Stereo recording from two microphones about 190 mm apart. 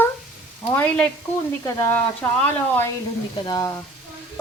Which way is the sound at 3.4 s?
20° left (ahead or behind).